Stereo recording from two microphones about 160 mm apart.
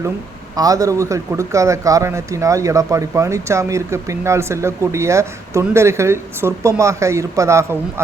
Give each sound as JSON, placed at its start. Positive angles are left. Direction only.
{"t": 0.5, "sound": "a man's voice", "side_deg": -20}